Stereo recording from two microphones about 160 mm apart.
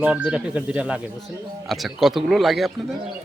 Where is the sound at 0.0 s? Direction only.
10° right (ahead or behind).